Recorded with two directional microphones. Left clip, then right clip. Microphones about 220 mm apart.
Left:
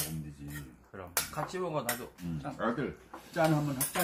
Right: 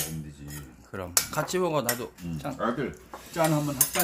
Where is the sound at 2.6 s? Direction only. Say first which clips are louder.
Right 4 dB; 5° right (ahead or behind).